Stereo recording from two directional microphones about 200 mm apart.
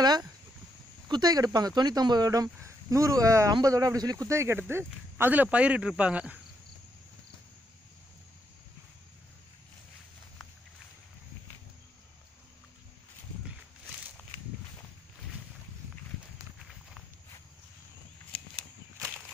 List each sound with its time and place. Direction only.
0.0 s speech: 20° right (ahead or behind)